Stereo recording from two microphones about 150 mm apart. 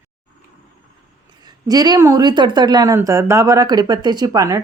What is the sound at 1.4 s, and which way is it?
Speech, 25° right (ahead or behind).